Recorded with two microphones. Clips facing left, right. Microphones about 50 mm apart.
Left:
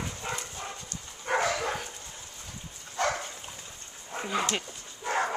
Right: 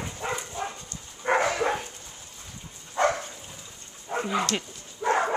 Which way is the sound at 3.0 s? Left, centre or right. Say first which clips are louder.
Right 5 dB; right.